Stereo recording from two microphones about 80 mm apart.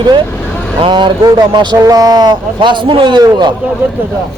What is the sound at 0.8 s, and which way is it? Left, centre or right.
Speech, right.